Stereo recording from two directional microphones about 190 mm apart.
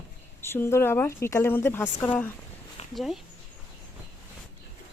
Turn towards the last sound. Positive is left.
turn(degrees=0)  # may be behind; listen again after turning